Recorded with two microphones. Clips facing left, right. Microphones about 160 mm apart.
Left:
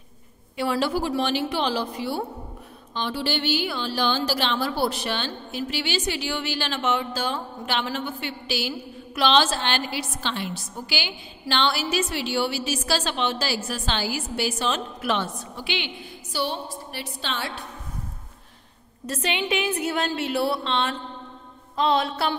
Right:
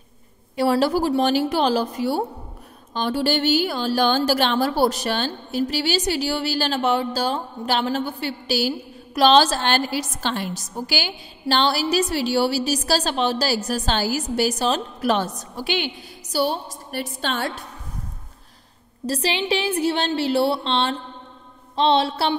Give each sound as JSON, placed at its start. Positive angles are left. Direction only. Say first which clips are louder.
{"t": 0.6, "sound": "speech", "louder": "right 5 dB", "side_deg": -40}
{"t": 19.0, "sound": "speech", "louder": "right 4 dB", "side_deg": -35}
{"t": 21.7, "sound": "a sound", "louder": "right 4 dB", "side_deg": -30}